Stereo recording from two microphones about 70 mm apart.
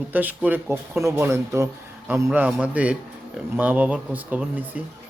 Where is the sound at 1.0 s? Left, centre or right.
Right.